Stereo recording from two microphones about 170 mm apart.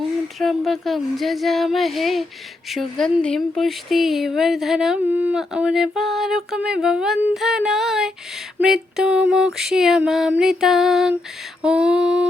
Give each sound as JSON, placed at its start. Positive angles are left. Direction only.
{"t": 0.3, "sound": "speech", "side_deg": 0}